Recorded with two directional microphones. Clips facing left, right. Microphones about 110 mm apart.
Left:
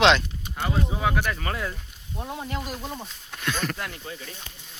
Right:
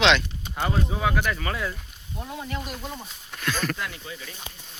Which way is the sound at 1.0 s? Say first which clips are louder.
Right 1 dB; 25° left (ahead or behind).